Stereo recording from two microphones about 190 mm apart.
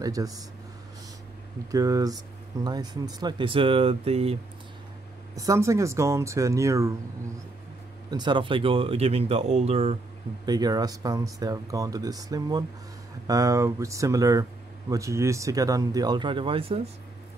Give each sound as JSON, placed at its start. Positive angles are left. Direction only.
{"t": 0.0, "sound": "speech", "side_deg": -20}
{"t": 1.7, "sound": "speech", "side_deg": -20}
{"t": 5.3, "sound": "speech", "side_deg": -15}
{"t": 8.1, "sound": "speech", "side_deg": -25}
{"t": 10.4, "sound": "speech", "side_deg": -20}